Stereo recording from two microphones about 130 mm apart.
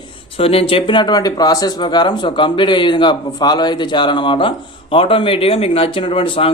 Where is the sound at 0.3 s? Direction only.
45° left (ahead or behind).